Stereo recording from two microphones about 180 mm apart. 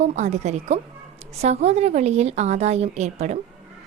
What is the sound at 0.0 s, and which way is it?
A woman's voice, 40° right (ahead or behind).